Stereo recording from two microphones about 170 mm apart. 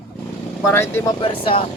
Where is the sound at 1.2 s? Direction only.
30° left (ahead or behind).